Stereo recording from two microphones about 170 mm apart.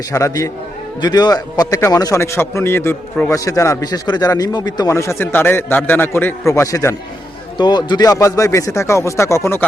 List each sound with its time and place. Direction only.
0.1 s a man's voice: 20° left (ahead or behind)